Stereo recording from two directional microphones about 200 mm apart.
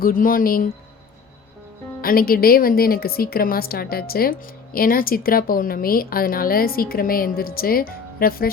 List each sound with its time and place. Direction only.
0.0 s speech: 45° left (ahead or behind)
2.0 s speech: 45° left (ahead or behind)